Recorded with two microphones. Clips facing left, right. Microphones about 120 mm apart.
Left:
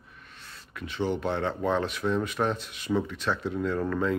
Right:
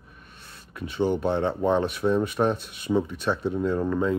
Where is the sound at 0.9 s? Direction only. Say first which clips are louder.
Right 4 dB; 20° right (ahead or behind).